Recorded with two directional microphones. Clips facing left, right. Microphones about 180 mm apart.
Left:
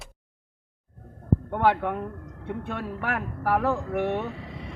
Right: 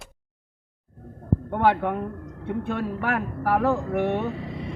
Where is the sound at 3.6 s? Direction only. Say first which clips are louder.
Right 3 dB; 20° right (ahead or behind).